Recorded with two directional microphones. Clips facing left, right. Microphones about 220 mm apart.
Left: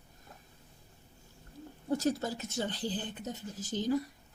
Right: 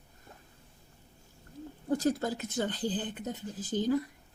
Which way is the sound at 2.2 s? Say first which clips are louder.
Right 3 dB; 55° right (ahead or behind).